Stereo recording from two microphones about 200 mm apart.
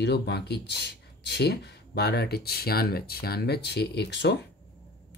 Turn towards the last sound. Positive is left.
turn(degrees=55)  # may be behind; listen again after turning